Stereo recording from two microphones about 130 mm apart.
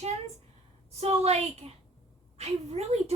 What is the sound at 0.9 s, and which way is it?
A woman's voice, 55° right (ahead or behind).